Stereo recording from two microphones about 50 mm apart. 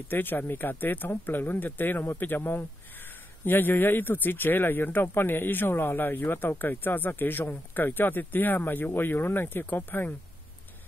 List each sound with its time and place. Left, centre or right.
0.1 s speech: left